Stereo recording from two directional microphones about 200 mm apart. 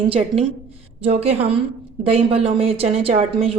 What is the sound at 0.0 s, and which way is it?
A woman's voice, 30° right (ahead or behind).